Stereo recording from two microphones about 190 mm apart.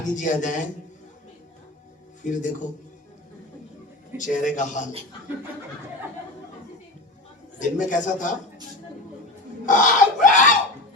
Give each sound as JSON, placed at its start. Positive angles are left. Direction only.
{"t": 0.0, "sound": "a man's voice", "side_deg": 40}
{"t": 2.2, "sound": "a man's voice", "side_deg": 40}
{"t": 4.2, "sound": "a man's voice", "side_deg": 40}
{"t": 7.6, "sound": "a man's voice", "side_deg": 40}
{"t": 9.6, "sound": "a sound", "side_deg": 40}